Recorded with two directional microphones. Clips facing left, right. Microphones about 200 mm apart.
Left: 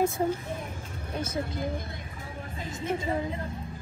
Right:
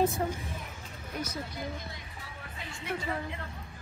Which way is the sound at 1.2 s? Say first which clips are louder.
Left 7 dB; 50° left (ahead or behind).